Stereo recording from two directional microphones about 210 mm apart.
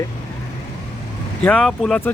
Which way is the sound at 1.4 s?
5° left (ahead or behind).